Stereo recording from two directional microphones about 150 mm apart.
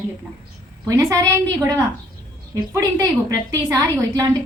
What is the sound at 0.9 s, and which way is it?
A woman's voice, 20° right (ahead or behind).